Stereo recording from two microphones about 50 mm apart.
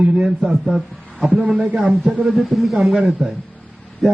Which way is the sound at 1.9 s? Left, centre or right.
Centre.